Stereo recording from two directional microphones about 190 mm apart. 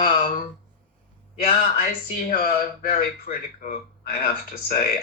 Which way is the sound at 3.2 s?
50° left (ahead or behind).